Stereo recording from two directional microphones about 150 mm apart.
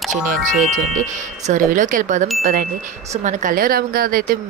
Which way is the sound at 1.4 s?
60° right (ahead or behind).